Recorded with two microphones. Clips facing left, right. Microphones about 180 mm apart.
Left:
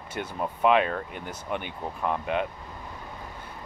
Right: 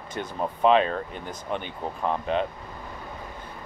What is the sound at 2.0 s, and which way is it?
Speech, 20° right (ahead or behind).